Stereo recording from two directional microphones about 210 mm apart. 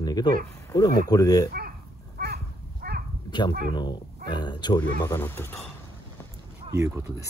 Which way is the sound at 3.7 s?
20° left (ahead or behind).